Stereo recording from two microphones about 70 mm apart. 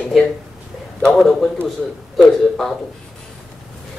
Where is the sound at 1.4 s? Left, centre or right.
Centre.